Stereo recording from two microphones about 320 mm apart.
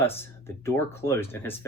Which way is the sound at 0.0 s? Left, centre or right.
Centre.